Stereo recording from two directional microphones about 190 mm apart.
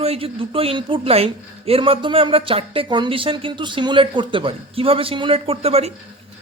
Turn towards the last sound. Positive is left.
turn(degrees=-30)  # may be behind; listen again after turning